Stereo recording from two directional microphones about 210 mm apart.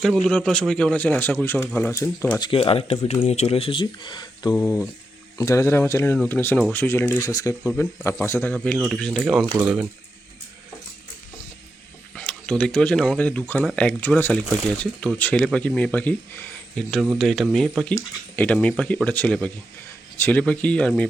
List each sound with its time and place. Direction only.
0.0 s speech: 5° left (ahead or behind)
2.4 s speech: 25° left (ahead or behind)
4.5 s speech: 10° left (ahead or behind)
12.1 s speech: 5° left (ahead or behind)